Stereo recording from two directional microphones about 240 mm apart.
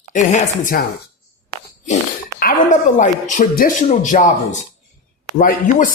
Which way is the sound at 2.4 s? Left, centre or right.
Left.